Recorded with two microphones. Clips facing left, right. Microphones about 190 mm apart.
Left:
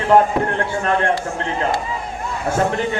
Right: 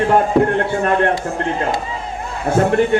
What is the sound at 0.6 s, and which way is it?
Speech, 60° right (ahead or behind).